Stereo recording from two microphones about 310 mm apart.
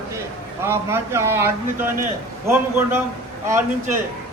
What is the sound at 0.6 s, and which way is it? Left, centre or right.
A man's voice, centre.